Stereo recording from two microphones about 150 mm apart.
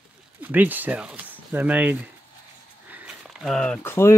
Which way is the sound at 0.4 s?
10° right (ahead or behind).